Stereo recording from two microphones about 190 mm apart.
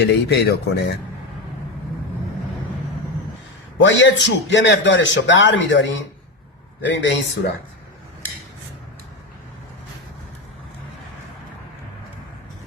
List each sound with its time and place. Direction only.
0.0 s speech: 60° left (ahead or behind)
3.8 s a man's voice: 75° left (ahead or behind)